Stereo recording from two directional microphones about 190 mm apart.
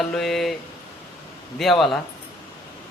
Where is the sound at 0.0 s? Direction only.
Centre (ahead or behind).